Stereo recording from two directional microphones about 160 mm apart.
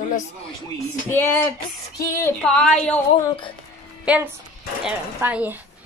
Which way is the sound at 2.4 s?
5° left (ahead or behind).